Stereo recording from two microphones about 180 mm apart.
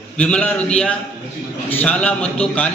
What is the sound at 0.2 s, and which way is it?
A man's voice, 5° left (ahead or behind).